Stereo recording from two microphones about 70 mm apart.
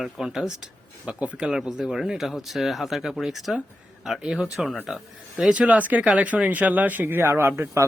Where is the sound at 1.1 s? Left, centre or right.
Centre.